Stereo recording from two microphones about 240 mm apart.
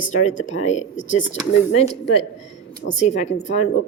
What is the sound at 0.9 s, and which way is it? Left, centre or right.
Speech, left.